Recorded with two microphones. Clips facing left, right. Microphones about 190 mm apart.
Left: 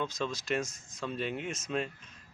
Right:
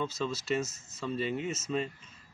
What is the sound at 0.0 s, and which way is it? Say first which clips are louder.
Speech: right 1 dB; 5° right (ahead or behind).